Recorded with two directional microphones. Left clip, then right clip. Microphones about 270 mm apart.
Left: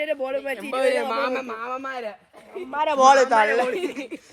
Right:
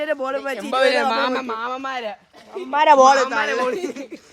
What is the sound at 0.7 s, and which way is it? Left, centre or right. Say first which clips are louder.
A man's voice: right 5 dB; right.